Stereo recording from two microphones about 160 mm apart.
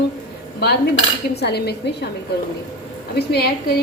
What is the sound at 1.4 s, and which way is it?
Speech, 90° left.